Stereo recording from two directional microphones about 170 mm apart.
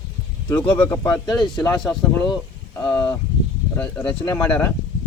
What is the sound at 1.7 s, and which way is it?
Speech, 5° left (ahead or behind).